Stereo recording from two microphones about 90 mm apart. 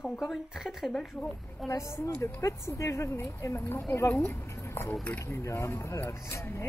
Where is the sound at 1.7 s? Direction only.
35° left (ahead or behind).